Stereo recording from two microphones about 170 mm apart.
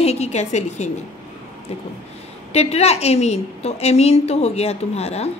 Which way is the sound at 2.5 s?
40° left (ahead or behind).